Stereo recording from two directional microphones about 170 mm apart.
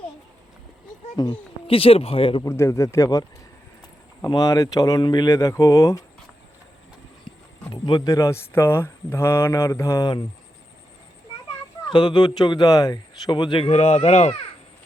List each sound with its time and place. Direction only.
1.1 s speech: 25° left (ahead or behind)
2.5 s speech: 15° left (ahead or behind)
7.7 s speech: 25° left (ahead or behind)
11.9 s speech: 25° left (ahead or behind)